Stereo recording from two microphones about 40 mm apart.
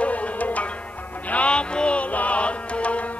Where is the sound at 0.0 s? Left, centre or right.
Left.